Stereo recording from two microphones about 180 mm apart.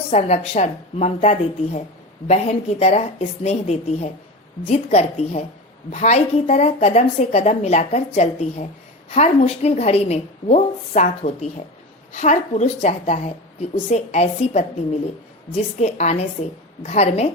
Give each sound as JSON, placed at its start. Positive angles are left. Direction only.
{"t": 0.1, "sound": "a woman's voice", "side_deg": 40}
{"t": 15.8, "sound": "a woman's voice", "side_deg": 40}